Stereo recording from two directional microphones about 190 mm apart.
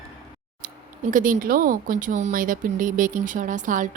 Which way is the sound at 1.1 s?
45° right (ahead or behind).